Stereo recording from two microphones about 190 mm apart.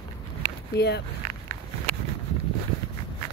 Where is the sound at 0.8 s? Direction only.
60° left (ahead or behind).